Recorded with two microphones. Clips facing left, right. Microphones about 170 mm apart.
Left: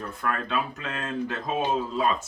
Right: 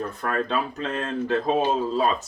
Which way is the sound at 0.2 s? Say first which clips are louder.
Right 2 dB; 35° right (ahead or behind).